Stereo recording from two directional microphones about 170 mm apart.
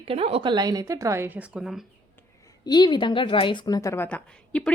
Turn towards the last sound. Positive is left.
turn(degrees=5)  # may be behind; listen again after turning